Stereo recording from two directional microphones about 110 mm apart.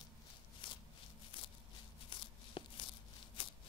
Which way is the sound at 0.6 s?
50° left (ahead or behind).